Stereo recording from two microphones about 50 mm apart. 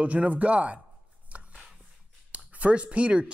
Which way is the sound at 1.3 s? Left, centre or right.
Right.